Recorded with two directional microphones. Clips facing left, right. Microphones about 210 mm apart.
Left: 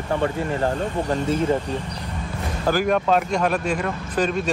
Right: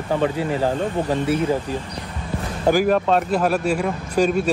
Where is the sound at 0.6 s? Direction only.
5° right (ahead or behind).